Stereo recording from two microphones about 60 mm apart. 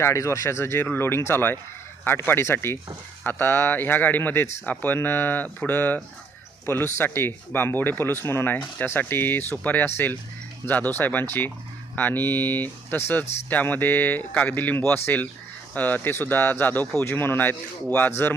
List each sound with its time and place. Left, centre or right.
0.0 s speech: left